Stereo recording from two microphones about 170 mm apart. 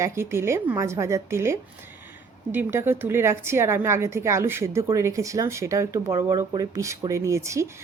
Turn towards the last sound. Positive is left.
turn(degrees=-15)  # may be behind; listen again after turning